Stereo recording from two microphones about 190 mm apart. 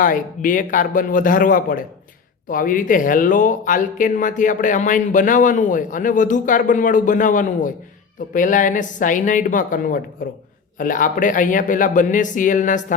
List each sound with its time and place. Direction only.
0.0 s speech: 45° left (ahead or behind)